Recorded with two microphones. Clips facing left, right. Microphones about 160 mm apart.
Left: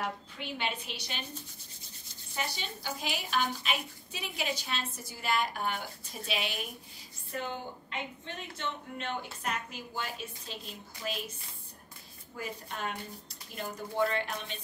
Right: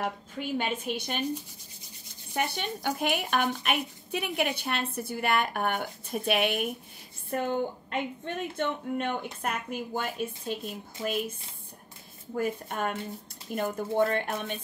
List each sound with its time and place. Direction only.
0.0 s a woman's voice: 45° right (ahead or behind)
2.3 s a woman's voice: 60° right (ahead or behind)
12.4 s a woman's voice: 50° right (ahead or behind)